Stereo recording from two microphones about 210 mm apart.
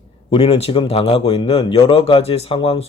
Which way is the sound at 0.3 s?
25° left (ahead or behind).